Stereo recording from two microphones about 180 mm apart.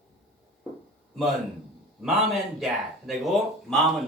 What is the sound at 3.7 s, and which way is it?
Speech, centre (ahead or behind).